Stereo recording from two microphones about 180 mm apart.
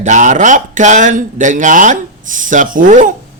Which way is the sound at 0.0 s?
45° right (ahead or behind).